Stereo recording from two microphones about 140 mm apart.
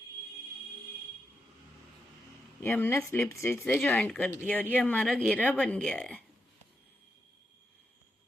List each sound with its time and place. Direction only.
2.6 s speech: 15° left (ahead or behind)